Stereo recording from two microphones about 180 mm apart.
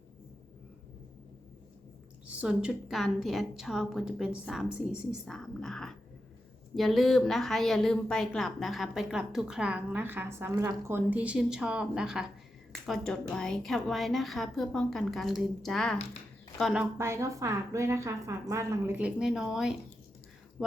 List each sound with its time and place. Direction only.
2.2 s a woman's voice: 5° right (ahead or behind)
17.0 s a woman's voice: 15° right (ahead or behind); by 20.7 s centre (ahead or behind)